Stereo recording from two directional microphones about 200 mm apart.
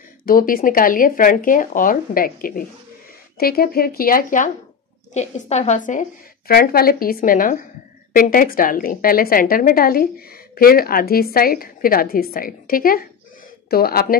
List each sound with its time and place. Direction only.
0.2 s a woman's voice: 45° left (ahead or behind)